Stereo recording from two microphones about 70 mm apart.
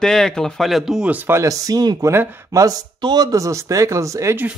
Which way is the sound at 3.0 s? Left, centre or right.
Right.